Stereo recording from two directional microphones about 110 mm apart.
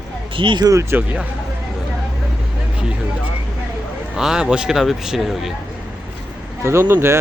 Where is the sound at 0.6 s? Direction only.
25° right (ahead or behind).